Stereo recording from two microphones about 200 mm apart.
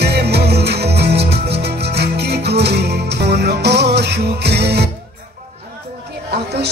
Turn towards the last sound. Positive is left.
turn(degrees=-55)  # may be behind; listen again after turning